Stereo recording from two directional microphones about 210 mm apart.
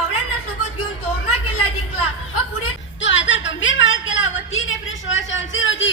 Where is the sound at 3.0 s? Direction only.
60° left (ahead or behind).